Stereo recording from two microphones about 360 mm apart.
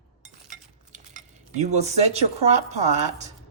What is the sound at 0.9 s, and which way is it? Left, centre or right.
Cutlery, right.